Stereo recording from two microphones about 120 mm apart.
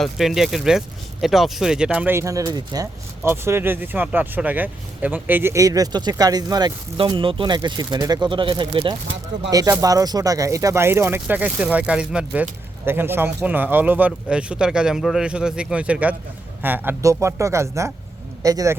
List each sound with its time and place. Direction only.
0.0 s speech: centre (ahead or behind)
2.1 s speech: 25° right (ahead or behind)
3.2 s speech: 20° right (ahead or behind)
6.9 s speech: 45° right (ahead or behind)
9.5 s speech: 30° right (ahead or behind); by 12.5 s 5° right (ahead or behind)
12.8 s speech: 20° right (ahead or behind)